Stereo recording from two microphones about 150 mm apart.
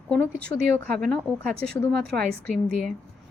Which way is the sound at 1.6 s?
90° right.